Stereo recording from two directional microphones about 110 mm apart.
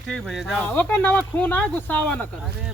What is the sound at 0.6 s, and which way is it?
Speech, 15° left (ahead or behind).